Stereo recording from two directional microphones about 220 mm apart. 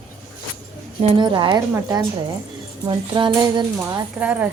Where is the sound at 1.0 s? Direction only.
20° right (ahead or behind).